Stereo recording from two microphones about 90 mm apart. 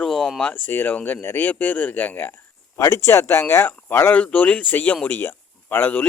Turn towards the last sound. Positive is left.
turn(degrees=20)  # may be behind; listen again after turning